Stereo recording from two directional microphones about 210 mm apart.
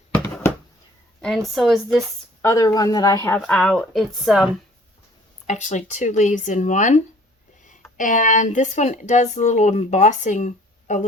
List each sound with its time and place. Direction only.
0.1 s a sound: 5° left (ahead or behind)
1.2 s speech: centre (ahead or behind)
2.4 s speech: 15° left (ahead or behind)
5.5 s speech: 35° left (ahead or behind)